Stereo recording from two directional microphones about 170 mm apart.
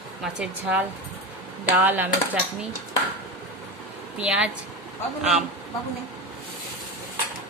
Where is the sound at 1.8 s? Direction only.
10° right (ahead or behind).